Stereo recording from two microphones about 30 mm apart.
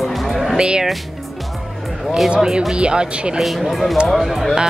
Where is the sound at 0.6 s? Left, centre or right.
Right.